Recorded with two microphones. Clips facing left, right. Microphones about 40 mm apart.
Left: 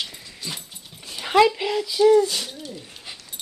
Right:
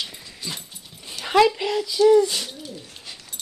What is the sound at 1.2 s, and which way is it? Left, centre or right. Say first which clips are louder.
Speech: even; centre.